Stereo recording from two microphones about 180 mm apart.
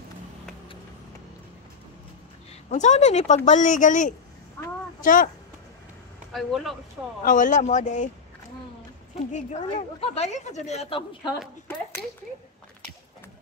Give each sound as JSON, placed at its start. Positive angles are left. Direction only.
{"t": 2.7, "sound": "a woman's voice", "side_deg": 40}
{"t": 6.3, "sound": "speech", "side_deg": 0}
{"t": 7.2, "sound": "speech", "side_deg": 45}
{"t": 9.3, "sound": "a woman's voice", "side_deg": 40}